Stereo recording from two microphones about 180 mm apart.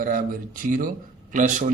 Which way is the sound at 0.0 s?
50° right (ahead or behind).